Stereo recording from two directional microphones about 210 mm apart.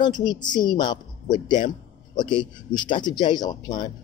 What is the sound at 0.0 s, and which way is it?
Speech, 20° left (ahead or behind).